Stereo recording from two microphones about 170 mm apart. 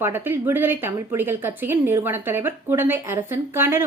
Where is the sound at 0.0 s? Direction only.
15° right (ahead or behind).